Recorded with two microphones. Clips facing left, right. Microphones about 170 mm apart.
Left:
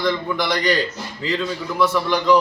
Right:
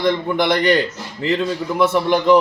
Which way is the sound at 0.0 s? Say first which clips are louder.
Right 4 dB; 55° right (ahead or behind).